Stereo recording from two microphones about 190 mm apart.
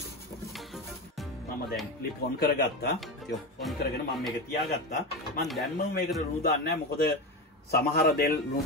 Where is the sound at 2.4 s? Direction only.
55° left (ahead or behind).